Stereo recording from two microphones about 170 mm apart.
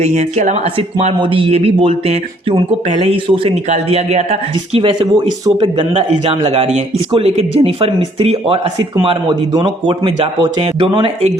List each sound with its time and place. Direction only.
0.0 s a man's voice: 40° right (ahead or behind)